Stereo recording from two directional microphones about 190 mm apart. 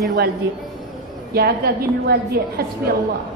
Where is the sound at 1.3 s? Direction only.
55° right (ahead or behind).